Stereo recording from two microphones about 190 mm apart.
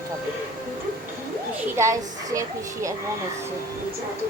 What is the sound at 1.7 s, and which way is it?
Speech, 15° right (ahead or behind).